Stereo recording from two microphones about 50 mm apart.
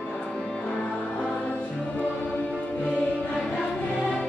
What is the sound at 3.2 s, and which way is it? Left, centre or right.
Music, centre.